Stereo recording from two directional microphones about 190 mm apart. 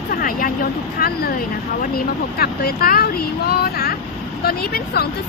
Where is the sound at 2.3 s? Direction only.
55° left (ahead or behind).